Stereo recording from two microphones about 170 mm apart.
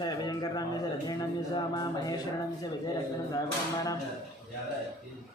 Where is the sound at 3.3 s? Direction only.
25° left (ahead or behind).